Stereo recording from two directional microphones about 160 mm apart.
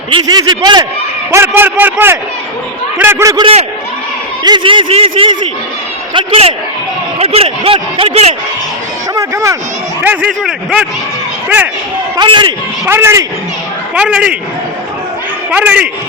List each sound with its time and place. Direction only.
0.1 s a man's voice: 25° right (ahead or behind)
1.3 s speech: 15° right (ahead or behind)
4.4 s speech: 30° right (ahead or behind)
9.1 s speech: 20° right (ahead or behind)
10.0 s speech: 10° right (ahead or behind)
12.1 s a man's voice: 30° right (ahead or behind)
12.8 s speech: 15° right (ahead or behind)
15.4 s speech: 10° right (ahead or behind)